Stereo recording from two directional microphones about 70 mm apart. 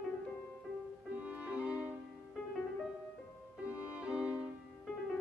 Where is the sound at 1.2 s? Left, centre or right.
Right.